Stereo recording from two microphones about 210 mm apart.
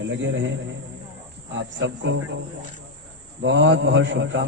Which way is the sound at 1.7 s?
60° right (ahead or behind).